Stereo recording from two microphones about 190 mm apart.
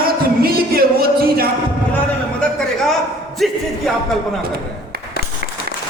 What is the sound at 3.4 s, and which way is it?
Music, centre (ahead or behind).